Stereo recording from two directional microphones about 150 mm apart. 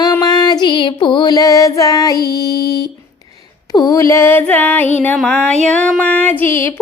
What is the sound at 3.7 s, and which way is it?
Music, 25° left (ahead or behind).